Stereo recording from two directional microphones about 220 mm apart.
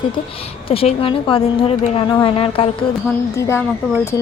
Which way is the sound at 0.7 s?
25° left (ahead or behind).